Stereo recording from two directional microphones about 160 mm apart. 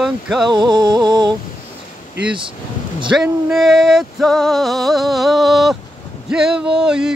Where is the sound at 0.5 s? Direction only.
30° right (ahead or behind).